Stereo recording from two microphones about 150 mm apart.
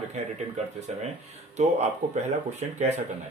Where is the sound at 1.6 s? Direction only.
50° right (ahead or behind).